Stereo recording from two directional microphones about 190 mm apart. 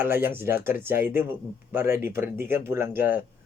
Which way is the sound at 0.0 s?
10° right (ahead or behind).